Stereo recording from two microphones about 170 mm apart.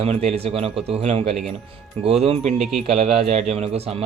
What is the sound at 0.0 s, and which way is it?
Speech, 40° right (ahead or behind).